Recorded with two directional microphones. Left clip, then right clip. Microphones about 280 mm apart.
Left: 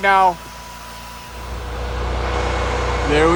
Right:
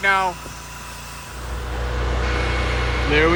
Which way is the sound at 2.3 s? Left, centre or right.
Left.